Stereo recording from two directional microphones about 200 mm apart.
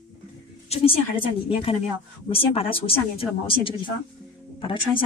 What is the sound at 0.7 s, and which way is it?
Speech, 30° left (ahead or behind).